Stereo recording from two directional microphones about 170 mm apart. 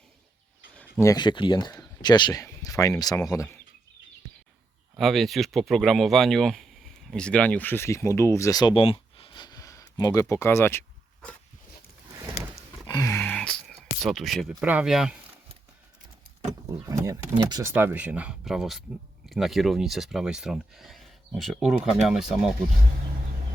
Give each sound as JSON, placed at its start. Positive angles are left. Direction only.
{"t": 0.9, "sound": "speech", "side_deg": 20}
{"t": 4.9, "sound": "speech", "side_deg": 0}
{"t": 8.7, "sound": "a sound", "side_deg": 35}
{"t": 12.9, "sound": "a sound", "side_deg": 20}
{"t": 14.6, "sound": "speech", "side_deg": -5}
{"t": 16.7, "sound": "speech", "side_deg": -20}